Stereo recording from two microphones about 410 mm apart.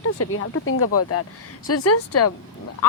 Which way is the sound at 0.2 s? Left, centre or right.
Left.